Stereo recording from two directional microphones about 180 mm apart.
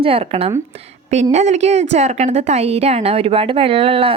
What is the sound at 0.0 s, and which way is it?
A woman's voice, 30° right (ahead or behind).